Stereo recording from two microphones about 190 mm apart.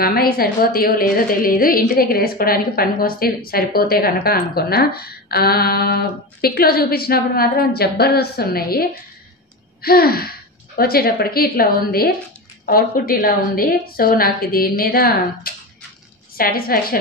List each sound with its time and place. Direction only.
0.0 s a woman's voice: 55° left (ahead or behind)
9.8 s a sound: 55° left (ahead or behind)
10.8 s a woman's voice: 55° left (ahead or behind)